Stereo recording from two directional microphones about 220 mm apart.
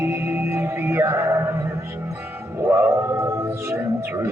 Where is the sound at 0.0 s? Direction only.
10° right (ahead or behind).